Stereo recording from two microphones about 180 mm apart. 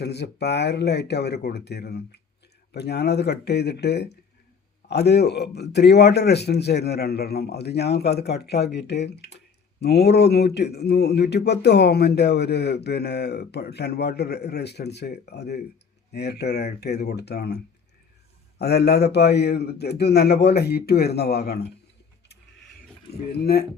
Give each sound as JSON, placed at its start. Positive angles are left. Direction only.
{"t": 0.0, "sound": "speech", "side_deg": 65}
{"t": 18.6, "sound": "speech", "side_deg": 65}
{"t": 23.4, "sound": "speech", "side_deg": 60}